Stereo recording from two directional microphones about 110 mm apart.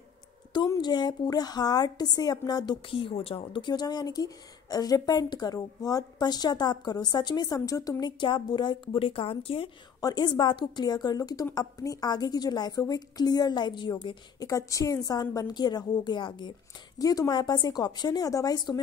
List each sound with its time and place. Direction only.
0.7 s a woman's voice: 40° left (ahead or behind)
8.0 s speech: 45° left (ahead or behind); by 9.7 s 60° left (ahead or behind)
9.9 s a woman's voice: 35° left (ahead or behind)
14.4 s a woman's voice: 30° left (ahead or behind)
17.0 s a woman's voice: 35° left (ahead or behind)